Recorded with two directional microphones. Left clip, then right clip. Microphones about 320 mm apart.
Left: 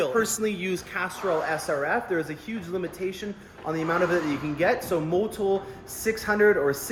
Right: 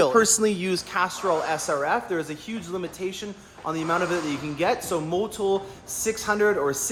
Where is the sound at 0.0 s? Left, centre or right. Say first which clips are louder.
Right 5 dB; right.